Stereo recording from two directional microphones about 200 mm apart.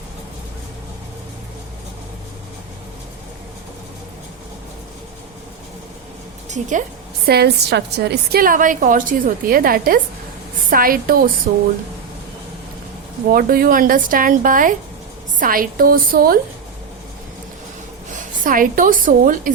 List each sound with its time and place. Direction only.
6.5 s a woman's voice: 40° right (ahead or behind)
7.3 s a woman's voice: 55° right (ahead or behind)
13.3 s a woman's voice: 45° right (ahead or behind)
18.1 s a woman's voice: 45° right (ahead or behind)